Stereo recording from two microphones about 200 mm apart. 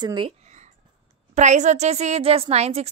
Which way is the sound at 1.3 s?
35° right (ahead or behind).